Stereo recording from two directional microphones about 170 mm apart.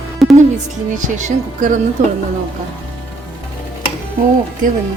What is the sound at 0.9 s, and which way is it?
Speech, 45° right (ahead or behind).